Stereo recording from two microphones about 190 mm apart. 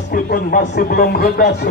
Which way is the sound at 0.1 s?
45° left (ahead or behind).